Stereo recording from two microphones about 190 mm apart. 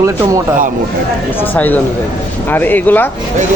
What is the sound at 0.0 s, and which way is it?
Speech, 15° right (ahead or behind).